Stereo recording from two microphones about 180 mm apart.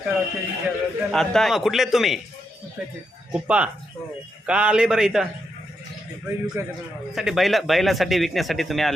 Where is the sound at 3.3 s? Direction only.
5° right (ahead or behind).